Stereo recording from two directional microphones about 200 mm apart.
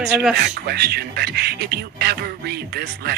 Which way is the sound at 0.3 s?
50° right (ahead or behind).